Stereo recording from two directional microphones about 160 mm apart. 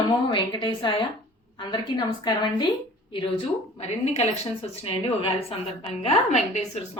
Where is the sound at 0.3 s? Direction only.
30° left (ahead or behind).